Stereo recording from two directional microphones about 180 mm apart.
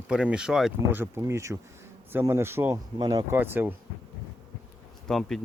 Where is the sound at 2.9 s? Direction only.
25° right (ahead or behind).